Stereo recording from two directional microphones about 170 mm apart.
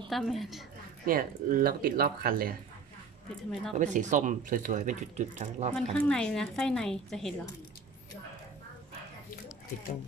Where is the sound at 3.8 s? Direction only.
45° right (ahead or behind).